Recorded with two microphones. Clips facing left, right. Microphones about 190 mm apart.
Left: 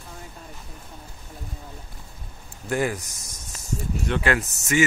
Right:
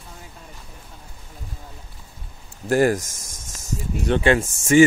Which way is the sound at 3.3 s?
90° right.